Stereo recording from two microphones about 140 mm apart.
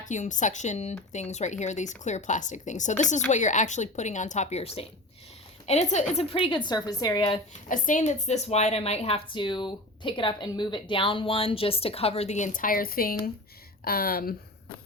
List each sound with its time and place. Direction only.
0.0 s a woman's voice: 60° left (ahead or behind); by 7.3 s 30° left (ahead or behind)
7.7 s a woman's voice: 65° left (ahead or behind); by 14.3 s 90° left